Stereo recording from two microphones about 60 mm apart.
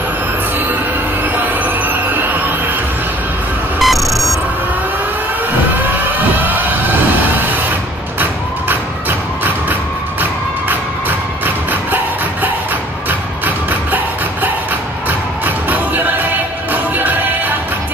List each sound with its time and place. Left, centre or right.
1.3 s train: right
3.8 s music: centre
6.4 s vehicle: right
10.7 s music: right
13.7 s music: right